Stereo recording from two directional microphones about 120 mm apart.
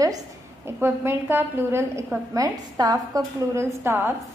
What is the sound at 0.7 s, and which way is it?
A woman's voice, 20° right (ahead or behind).